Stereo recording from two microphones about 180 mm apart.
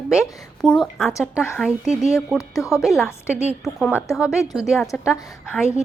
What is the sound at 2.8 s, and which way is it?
Speech, centre (ahead or behind).